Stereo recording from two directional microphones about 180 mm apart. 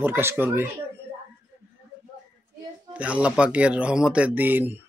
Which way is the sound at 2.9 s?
5° right (ahead or behind).